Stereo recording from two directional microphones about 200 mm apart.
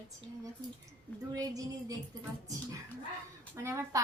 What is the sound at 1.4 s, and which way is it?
Speech, 15° right (ahead or behind).